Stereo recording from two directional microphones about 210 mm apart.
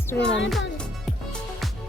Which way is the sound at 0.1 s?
5° left (ahead or behind).